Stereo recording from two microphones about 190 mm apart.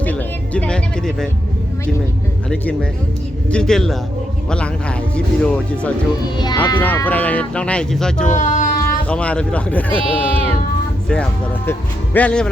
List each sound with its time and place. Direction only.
0.0 s speech: 10° left (ahead or behind)
3.5 s speech: 5° left (ahead or behind)
6.3 s speech: 20° left (ahead or behind)
6.7 s speech: 10° left (ahead or behind)
8.3 s a sound: 40° left (ahead or behind)
9.0 s speech: 5° left (ahead or behind)
9.9 s speech: 30° right (ahead or behind)
11.1 s speech: 10° left (ahead or behind)